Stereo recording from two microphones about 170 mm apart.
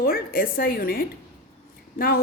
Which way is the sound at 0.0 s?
60° left (ahead or behind).